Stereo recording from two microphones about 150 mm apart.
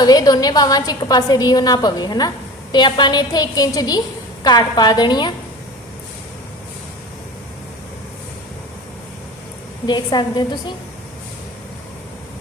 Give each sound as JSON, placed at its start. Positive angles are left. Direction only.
{"t": 0.0, "sound": "a woman's voice", "side_deg": 25}
{"t": 9.8, "sound": "a woman's voice", "side_deg": 30}